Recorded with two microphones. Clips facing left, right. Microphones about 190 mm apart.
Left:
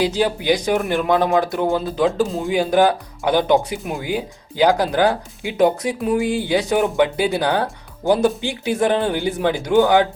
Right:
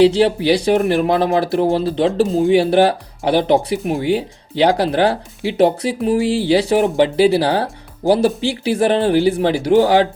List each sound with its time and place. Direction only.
0.0 s speech: 30° right (ahead or behind)